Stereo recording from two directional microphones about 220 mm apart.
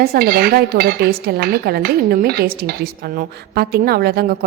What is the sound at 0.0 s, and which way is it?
Dishes, 45° right (ahead or behind).